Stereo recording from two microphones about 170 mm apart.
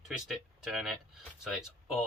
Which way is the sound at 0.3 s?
5° right (ahead or behind).